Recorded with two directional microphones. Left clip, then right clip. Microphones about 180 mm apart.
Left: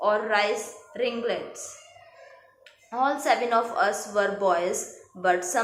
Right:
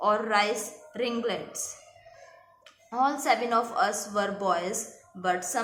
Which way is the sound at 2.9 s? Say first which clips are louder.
Left 2 dB; 25° right (ahead or behind).